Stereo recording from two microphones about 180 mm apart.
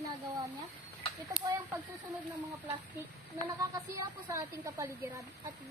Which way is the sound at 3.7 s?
15° right (ahead or behind).